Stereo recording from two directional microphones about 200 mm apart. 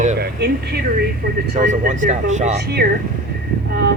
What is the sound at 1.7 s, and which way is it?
Speech, 40° right (ahead or behind).